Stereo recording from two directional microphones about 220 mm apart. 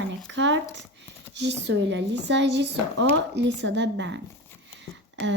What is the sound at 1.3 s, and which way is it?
Speech, 50° right (ahead or behind).